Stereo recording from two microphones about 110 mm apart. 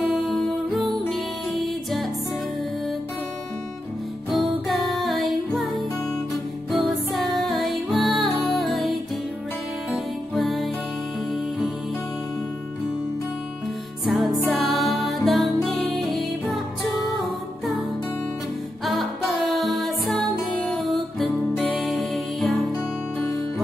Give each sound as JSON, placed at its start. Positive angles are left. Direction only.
{"t": 0.0, "sound": "music", "side_deg": 0}
{"t": 4.3, "sound": "music", "side_deg": 0}
{"t": 7.1, "sound": "music", "side_deg": 0}
{"t": 14.0, "sound": "music", "side_deg": 0}
{"t": 18.9, "sound": "music", "side_deg": 0}